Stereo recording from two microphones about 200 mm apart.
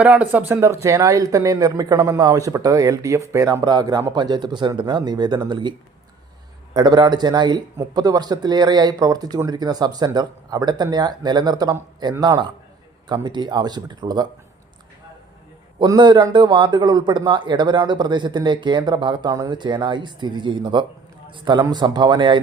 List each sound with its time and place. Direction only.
0.0 s speech: 5° right (ahead or behind); by 5.7 s 20° right (ahead or behind)
6.7 s a man's voice: 20° right (ahead or behind)
15.8 s a man's voice: 20° right (ahead or behind)